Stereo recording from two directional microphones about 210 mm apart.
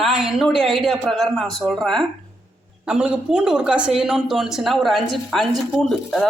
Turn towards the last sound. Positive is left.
turn(degrees=0)  # may be behind; listen again after turning